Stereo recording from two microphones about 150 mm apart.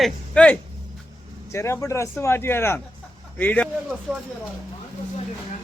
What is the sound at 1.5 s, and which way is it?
A man's voice, 20° left (ahead or behind).